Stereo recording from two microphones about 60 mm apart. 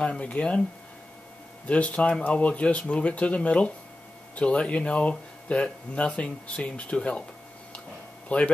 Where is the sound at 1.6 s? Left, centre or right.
Left.